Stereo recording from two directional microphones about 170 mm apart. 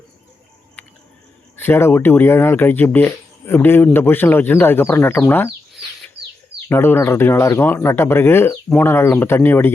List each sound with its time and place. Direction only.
1.5 s speech: 15° left (ahead or behind)
6.7 s speech: 15° left (ahead or behind)